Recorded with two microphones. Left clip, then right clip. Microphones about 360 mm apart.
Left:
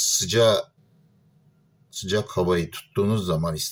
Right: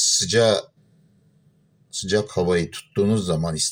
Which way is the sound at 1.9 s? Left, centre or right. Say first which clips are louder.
Right 3 dB; centre.